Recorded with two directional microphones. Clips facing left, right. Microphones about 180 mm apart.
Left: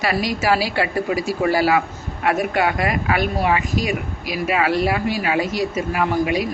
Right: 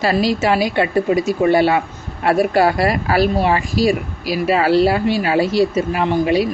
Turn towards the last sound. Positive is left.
turn(degrees=-30)  # may be behind; listen again after turning